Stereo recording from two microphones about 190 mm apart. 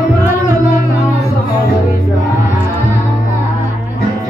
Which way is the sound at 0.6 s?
40° left (ahead or behind).